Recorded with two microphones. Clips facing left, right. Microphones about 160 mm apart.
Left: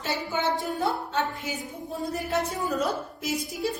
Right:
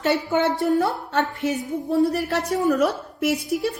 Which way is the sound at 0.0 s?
65° right (ahead or behind).